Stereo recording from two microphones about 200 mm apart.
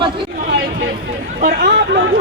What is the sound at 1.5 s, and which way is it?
Speech, 55° right (ahead or behind).